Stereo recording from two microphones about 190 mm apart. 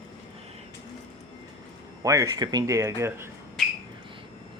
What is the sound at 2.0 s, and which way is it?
Speech, 15° right (ahead or behind).